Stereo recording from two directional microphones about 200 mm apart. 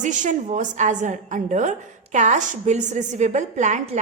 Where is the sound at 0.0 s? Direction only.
40° right (ahead or behind).